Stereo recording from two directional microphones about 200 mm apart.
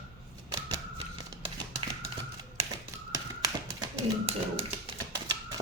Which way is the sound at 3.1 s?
20° right (ahead or behind).